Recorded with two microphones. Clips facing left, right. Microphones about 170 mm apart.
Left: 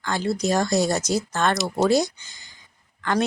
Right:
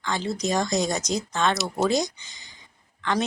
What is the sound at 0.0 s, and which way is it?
Speech, 5° left (ahead or behind).